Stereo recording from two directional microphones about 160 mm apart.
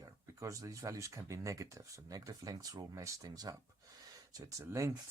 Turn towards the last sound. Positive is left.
turn(degrees=-20)  # may be behind; listen again after turning